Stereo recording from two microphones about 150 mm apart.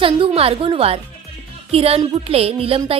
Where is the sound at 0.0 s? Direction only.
40° right (ahead or behind).